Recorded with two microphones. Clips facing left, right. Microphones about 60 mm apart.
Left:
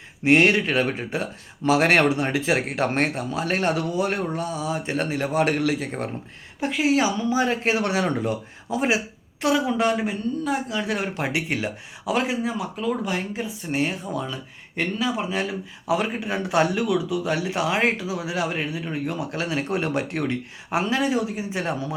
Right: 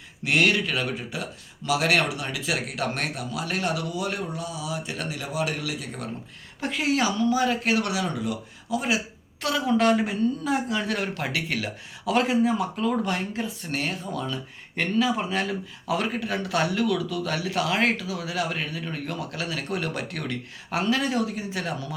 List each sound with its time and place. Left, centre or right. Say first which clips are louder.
0.3 s speech: left 5 dB; left
6.6 s speech: left 4 dB; centre; by 9.0 s left
9.6 s speech: right 1 dB; centre
10.8 s speech: left 2 dB; centre
12.1 s speech: right 2 dB; centre; by 21.9 s left